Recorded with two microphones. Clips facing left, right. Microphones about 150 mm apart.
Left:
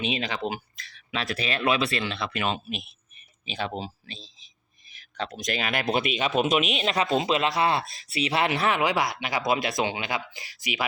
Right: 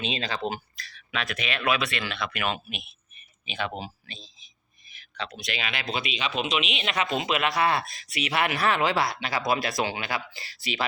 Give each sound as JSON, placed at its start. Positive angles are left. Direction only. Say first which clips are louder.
{"t": 0.0, "sound": "speech", "louder": "left 1 dB", "side_deg": 15}
{"t": 6.9, "sound": "speech", "louder": "left 2 dB", "side_deg": 25}